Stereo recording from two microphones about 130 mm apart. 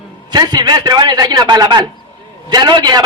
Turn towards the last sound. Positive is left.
turn(degrees=-35)  # may be behind; listen again after turning